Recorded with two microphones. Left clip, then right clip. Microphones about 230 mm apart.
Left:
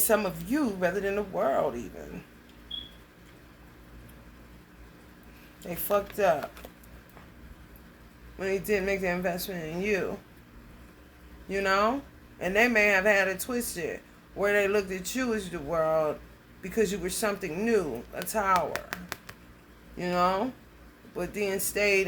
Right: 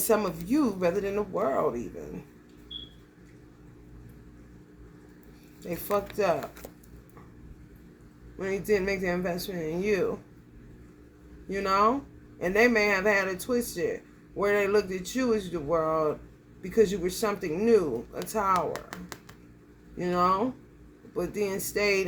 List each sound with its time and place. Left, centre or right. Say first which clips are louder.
0.1 s speech: right 1 dB; centre
5.9 s speech: left 2 dB; centre
8.4 s speech: right 1 dB; centre
11.4 s speech: right 1 dB; centre